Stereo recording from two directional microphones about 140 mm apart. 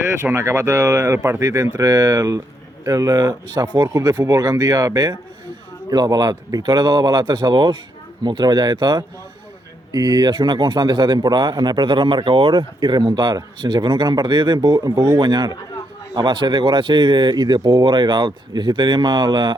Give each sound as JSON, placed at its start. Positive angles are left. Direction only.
{"t": 0.2, "sound": "a man's voice", "side_deg": -20}